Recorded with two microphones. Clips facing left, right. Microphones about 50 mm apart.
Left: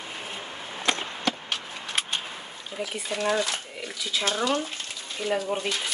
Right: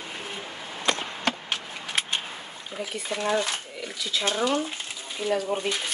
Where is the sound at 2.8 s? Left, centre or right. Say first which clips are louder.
Left 1 dB; right.